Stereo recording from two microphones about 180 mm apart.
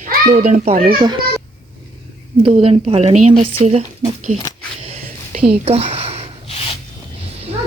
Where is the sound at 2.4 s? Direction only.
30° right (ahead or behind).